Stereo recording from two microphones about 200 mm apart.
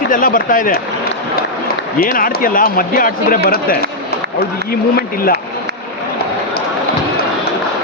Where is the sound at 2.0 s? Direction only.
45° left (ahead or behind).